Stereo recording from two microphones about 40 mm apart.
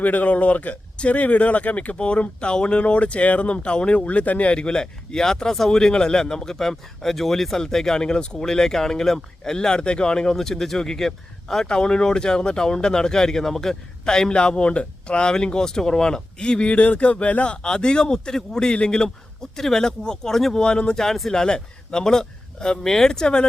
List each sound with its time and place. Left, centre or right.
0.0 s speech: left; by 11.6 s centre
11.6 s speech: centre
17.6 s speech: centre
20.6 s speech: left